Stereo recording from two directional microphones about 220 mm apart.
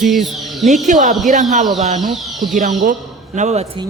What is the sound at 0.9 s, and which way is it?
A man's voice, 35° right (ahead or behind).